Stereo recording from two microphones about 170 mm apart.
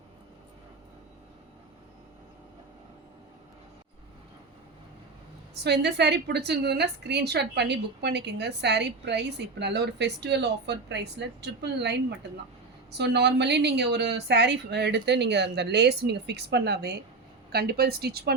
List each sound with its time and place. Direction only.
5.6 s a woman's voice: 80° right